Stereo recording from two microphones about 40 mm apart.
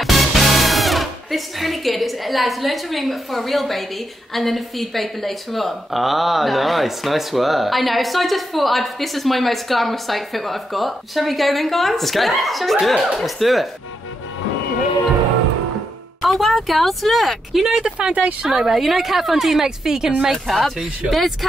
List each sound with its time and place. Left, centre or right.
0.0 s music: centre
4.3 s a woman's voice: centre
16.2 s a woman's voice: centre
18.0 s speech: right
18.4 s a woman's voice: centre
20.2 s a woman's voice: centre